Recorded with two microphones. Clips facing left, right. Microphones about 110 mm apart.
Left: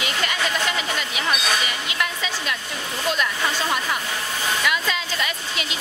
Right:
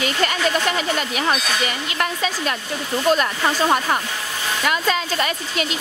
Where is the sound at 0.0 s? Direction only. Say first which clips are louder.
Right 5 dB; 45° right (ahead or behind).